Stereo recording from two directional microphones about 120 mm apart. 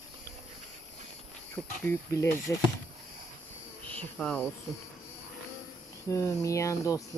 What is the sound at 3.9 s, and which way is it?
Cricket, 10° left (ahead or behind).